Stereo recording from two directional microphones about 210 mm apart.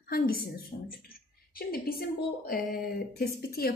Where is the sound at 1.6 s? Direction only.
45° left (ahead or behind).